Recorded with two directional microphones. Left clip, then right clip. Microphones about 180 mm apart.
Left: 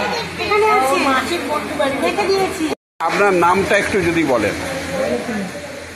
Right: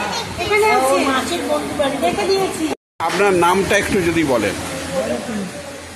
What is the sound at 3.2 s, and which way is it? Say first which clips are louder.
Speech: even; 20° right (ahead or behind).